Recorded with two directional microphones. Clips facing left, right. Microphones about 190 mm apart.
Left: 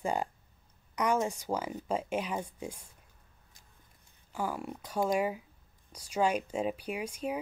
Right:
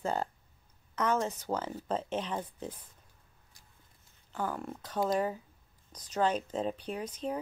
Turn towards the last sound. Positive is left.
turn(degrees=10)  # may be behind; listen again after turning